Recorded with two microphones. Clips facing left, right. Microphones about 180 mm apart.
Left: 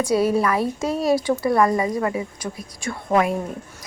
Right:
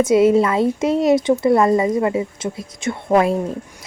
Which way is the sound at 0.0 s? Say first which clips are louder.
Right 6 dB; 20° right (ahead or behind).